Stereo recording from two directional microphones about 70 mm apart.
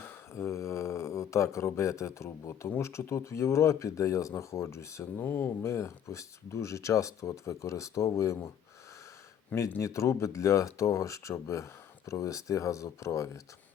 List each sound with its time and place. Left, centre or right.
0.3 s speech: left
5.2 s speech: left
5.7 s speech: left
9.8 s speech: left